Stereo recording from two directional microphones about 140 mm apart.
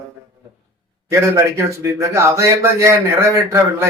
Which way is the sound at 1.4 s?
20° right (ahead or behind).